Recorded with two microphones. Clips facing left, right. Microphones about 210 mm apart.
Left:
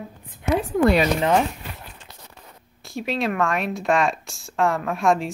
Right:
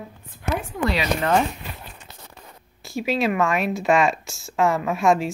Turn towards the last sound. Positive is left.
turn(degrees=0)  # may be behind; listen again after turning